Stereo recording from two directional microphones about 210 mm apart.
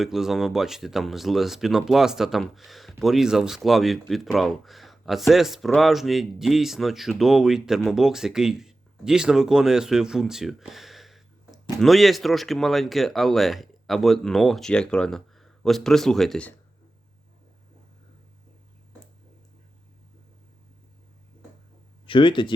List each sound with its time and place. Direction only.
0.0 s speech: centre (ahead or behind)
22.0 s speech: 25° left (ahead or behind)